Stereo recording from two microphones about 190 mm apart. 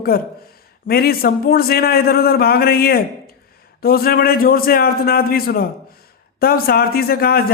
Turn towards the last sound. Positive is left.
turn(degrees=55)  # may be behind; listen again after turning